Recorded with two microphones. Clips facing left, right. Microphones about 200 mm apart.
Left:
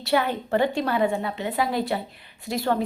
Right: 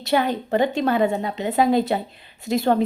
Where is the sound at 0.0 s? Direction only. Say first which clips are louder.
Right 2 dB; 20° right (ahead or behind).